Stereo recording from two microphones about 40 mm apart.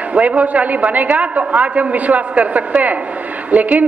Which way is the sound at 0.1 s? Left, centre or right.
Right.